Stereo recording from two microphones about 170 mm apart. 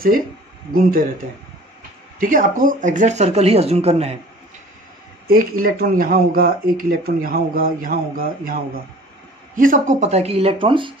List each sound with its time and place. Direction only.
0.7 s speech: 55° right (ahead or behind); by 4.2 s 35° right (ahead or behind)
5.3 s speech: 55° right (ahead or behind); by 10.9 s 30° right (ahead or behind)